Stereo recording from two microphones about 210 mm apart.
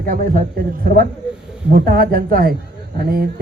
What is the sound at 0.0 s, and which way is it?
A man's voice, 45° right (ahead or behind).